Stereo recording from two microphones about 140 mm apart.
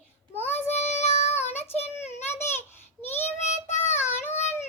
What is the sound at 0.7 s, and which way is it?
Child singing, 50° left (ahead or behind).